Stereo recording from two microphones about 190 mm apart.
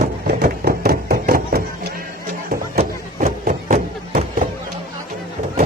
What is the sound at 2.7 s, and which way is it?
Music, 45° right (ahead or behind).